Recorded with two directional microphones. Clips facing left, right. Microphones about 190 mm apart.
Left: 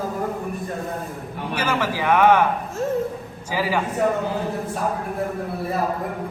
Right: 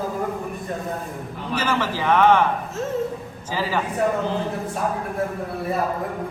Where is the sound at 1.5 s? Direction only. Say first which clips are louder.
Even; 10° left (ahead or behind).